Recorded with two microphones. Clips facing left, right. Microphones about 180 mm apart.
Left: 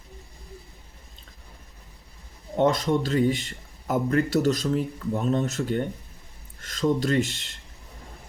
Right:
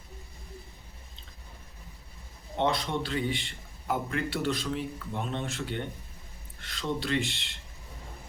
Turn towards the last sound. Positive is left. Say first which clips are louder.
# left 6 dB
turn(degrees=45)  # may be behind; listen again after turning